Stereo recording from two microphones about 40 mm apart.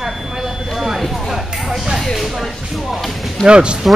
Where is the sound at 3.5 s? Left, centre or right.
Right.